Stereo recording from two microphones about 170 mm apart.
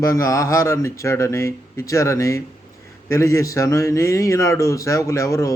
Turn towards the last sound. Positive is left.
turn(degrees=20)  # may be behind; listen again after turning